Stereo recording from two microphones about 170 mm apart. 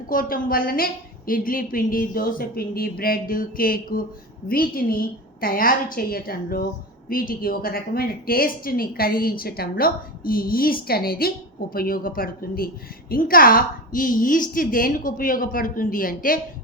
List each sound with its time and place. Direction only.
0.1 s a woman's voice: 55° left (ahead or behind)